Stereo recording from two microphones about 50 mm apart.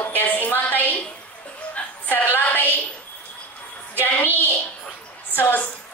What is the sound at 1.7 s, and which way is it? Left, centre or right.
Music, left.